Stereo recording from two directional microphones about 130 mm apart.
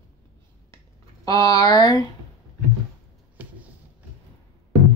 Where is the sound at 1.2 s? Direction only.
25° left (ahead or behind).